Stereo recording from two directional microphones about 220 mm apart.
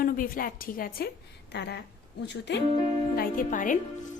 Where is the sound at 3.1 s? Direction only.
40° left (ahead or behind).